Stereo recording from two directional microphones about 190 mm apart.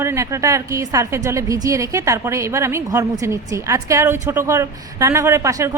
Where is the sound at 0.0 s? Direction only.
15° right (ahead or behind).